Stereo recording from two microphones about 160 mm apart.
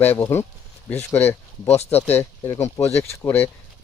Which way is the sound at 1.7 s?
40° left (ahead or behind).